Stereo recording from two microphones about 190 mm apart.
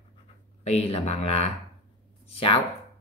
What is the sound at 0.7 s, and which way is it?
Speech, 35° left (ahead or behind).